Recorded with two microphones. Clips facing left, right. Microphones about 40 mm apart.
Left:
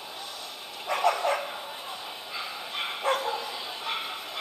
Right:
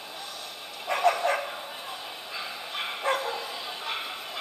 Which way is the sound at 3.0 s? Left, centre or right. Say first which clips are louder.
Left 1 dB; right.